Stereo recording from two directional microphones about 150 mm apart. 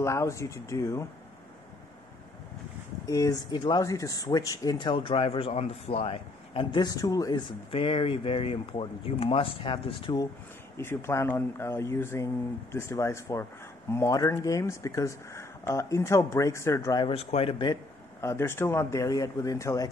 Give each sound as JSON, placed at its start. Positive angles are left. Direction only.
{"t": 0.0, "sound": "speech", "side_deg": 20}
{"t": 3.1, "sound": "speech", "side_deg": 25}
{"t": 7.7, "sound": "speech", "side_deg": 35}
{"t": 10.8, "sound": "speech", "side_deg": 15}
{"t": 17.0, "sound": "speech", "side_deg": 40}
{"t": 18.2, "sound": "speech", "side_deg": 15}